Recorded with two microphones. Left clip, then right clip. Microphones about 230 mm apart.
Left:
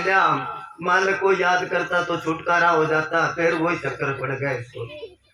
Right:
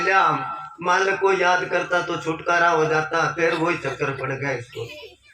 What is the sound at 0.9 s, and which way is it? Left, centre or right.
A man's voice, right.